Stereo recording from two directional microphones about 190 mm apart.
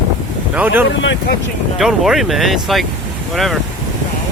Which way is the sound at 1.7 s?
Centre (ahead or behind).